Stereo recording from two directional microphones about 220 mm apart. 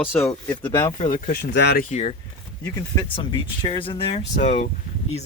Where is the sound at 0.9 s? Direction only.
30° left (ahead or behind).